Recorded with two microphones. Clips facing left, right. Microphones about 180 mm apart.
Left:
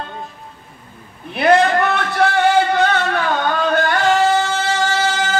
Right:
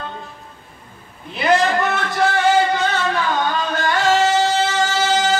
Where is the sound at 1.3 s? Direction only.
60° left (ahead or behind).